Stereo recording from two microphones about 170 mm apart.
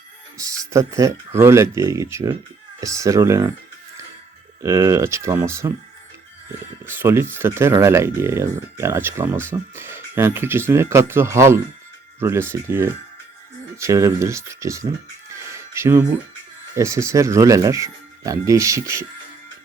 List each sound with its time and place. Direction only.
0.3 s speech: 20° right (ahead or behind)
4.6 s speech: 20° right (ahead or behind)
6.8 s speech: 15° right (ahead or behind)
15.4 s a sound: 15° right (ahead or behind)
16.7 s speech: 15° right (ahead or behind)